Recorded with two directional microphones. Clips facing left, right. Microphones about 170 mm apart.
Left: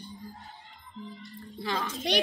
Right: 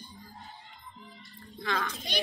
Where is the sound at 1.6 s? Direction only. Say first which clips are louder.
Left 1 dB; 30° left (ahead or behind).